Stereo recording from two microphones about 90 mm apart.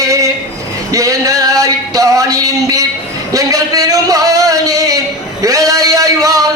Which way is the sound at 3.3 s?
40° right (ahead or behind).